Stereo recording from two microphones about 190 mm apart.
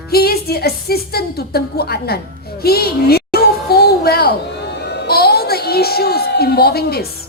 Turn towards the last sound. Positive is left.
turn(degrees=55)  # may be behind; listen again after turning